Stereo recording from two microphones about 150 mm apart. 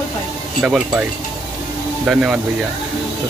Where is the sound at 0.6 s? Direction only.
5° right (ahead or behind).